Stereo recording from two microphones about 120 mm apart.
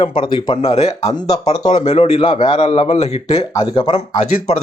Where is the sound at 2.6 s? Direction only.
65° left (ahead or behind).